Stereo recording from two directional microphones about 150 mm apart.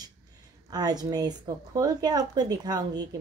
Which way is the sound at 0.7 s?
25° right (ahead or behind).